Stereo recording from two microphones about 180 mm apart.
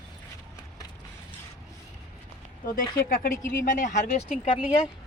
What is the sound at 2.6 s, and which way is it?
Speech, 50° left (ahead or behind).